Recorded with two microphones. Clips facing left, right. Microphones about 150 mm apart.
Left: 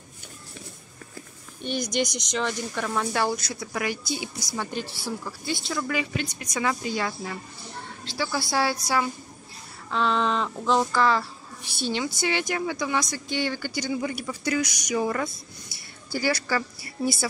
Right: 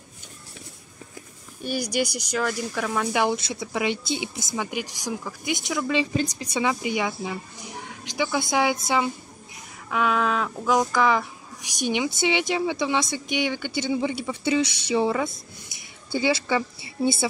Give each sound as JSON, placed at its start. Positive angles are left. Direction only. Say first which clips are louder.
{"t": 1.6, "sound": "speech", "louder": "right 1 dB", "side_deg": -5}
{"t": 3.2, "sound": "speech", "louder": "right 3 dB", "side_deg": -20}
{"t": 6.2, "sound": "speech", "louder": "right 4 dB", "side_deg": -30}
{"t": 6.6, "sound": "speech", "louder": "right 2 dB", "side_deg": -15}
{"t": 9.8, "sound": "speech", "louder": "right 1 dB", "side_deg": -10}